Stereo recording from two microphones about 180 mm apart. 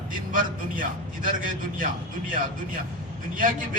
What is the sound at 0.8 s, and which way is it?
A man's voice, 50° right (ahead or behind).